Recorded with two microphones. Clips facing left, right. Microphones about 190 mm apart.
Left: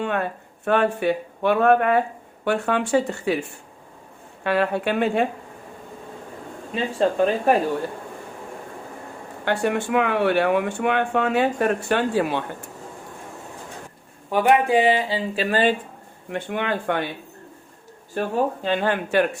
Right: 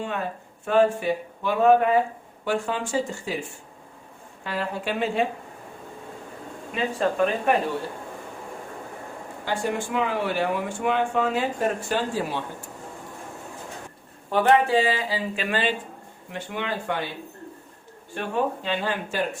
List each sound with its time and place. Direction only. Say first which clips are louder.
0.0 s speech: left 5 dB; 65° left (ahead or behind)
4.4 s speech: left 7 dB; 65° left (ahead or behind)
6.7 s speech: left 3 dB; 30° left (ahead or behind)
9.4 s speech: left 5 dB; 65° left (ahead or behind)
14.3 s speech: left 1 dB; 15° left (ahead or behind); by 15.7 s 40° left (ahead or behind)
16.3 s speech: left 5 dB; 55° left (ahead or behind)
18.1 s speech: left 3 dB; 40° left (ahead or behind); by 19.4 s 60° left (ahead or behind)